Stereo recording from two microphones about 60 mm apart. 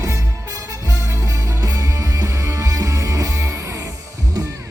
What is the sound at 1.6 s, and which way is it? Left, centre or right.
Music, right.